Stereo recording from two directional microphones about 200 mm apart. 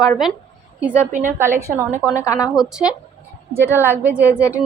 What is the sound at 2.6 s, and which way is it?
A woman's voice, 5° right (ahead or behind).